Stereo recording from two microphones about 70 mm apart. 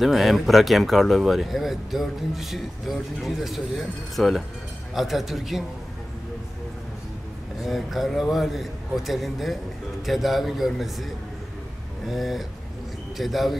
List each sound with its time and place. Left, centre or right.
0.0 s speech: centre
7.6 s speech: centre
12.1 s speech: centre